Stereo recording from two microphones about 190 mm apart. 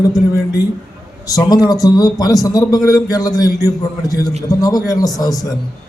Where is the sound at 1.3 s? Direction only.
20° left (ahead or behind).